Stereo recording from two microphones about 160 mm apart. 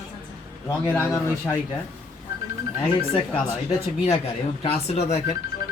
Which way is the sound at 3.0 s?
35° left (ahead or behind).